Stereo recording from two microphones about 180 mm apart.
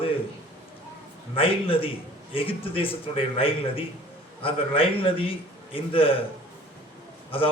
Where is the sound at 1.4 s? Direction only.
30° left (ahead or behind).